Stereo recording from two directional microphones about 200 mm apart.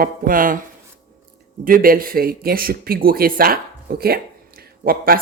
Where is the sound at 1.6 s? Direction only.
45° right (ahead or behind).